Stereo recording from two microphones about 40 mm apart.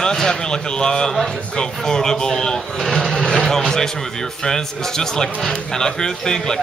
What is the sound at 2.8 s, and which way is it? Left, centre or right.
Speech, centre.